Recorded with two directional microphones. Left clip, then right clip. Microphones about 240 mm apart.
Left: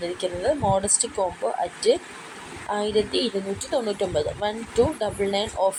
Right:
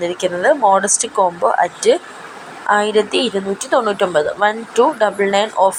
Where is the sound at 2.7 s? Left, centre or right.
Centre.